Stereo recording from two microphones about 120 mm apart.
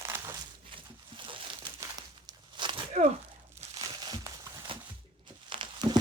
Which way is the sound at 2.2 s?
40° right (ahead or behind).